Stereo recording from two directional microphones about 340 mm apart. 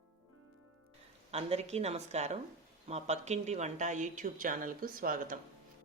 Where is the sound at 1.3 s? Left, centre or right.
Centre.